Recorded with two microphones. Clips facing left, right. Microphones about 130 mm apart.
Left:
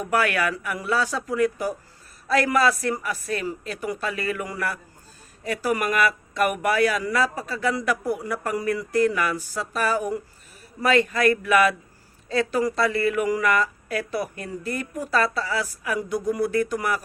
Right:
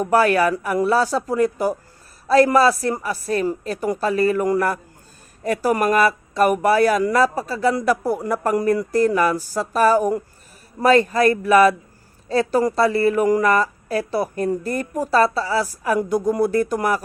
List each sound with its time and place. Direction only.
0.0 s speech: 35° right (ahead or behind)